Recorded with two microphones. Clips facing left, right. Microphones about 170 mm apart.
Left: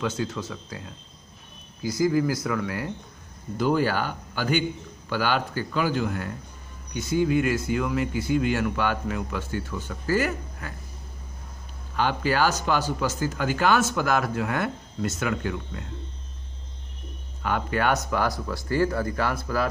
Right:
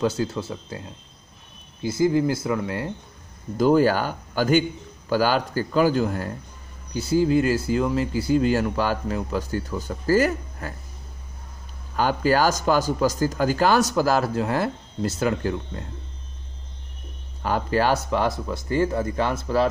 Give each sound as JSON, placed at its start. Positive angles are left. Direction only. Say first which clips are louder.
{"t": 0.0, "sound": "speech", "louder": "right 4 dB", "side_deg": -35}
{"t": 3.5, "sound": "speech", "louder": "right 5 dB", "side_deg": -40}
{"t": 12.0, "sound": "speech", "louder": "right 3 dB", "side_deg": -40}
{"t": 17.4, "sound": "speech", "louder": "right 4 dB", "side_deg": -35}